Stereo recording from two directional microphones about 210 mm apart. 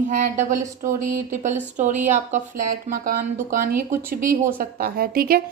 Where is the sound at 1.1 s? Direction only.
40° right (ahead or behind).